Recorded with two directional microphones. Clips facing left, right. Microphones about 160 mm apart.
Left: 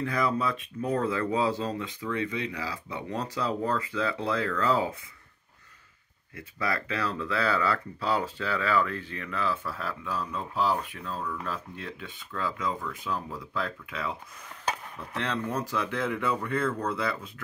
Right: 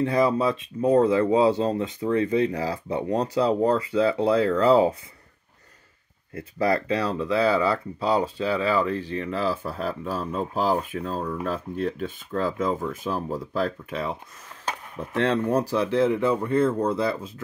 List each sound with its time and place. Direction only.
0.0 s speech: 30° right (ahead or behind)
6.3 s speech: 35° right (ahead or behind)
13.0 s speech: 30° right (ahead or behind)
13.4 s speech: 40° right (ahead or behind)
15.0 s speech: 45° right (ahead or behind); by 17.2 s 30° right (ahead or behind)